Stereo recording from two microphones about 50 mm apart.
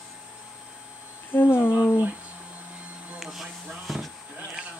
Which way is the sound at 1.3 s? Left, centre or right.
Left.